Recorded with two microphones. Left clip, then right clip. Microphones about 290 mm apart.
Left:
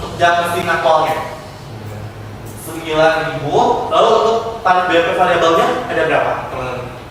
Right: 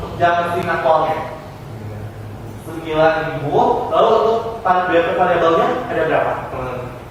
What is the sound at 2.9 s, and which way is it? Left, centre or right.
Speech, centre.